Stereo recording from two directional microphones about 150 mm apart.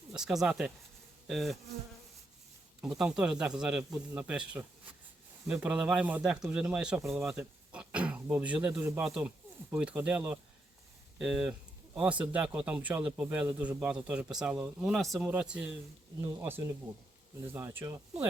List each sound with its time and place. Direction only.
0.1 s speech: 5° right (ahead or behind)
3.0 s speech: 5° right (ahead or behind)